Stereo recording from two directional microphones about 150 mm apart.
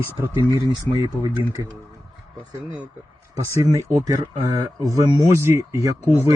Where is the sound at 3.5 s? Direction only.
20° right (ahead or behind).